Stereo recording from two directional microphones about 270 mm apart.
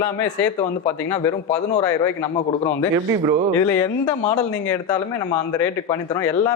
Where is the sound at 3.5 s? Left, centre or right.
Centre.